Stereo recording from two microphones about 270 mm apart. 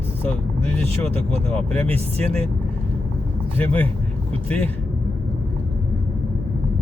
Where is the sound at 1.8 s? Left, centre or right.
Right.